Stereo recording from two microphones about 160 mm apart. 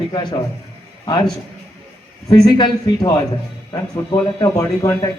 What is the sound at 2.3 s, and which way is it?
Speech, 25° left (ahead or behind).